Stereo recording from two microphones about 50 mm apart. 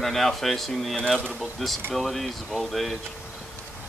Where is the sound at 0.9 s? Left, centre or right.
Centre.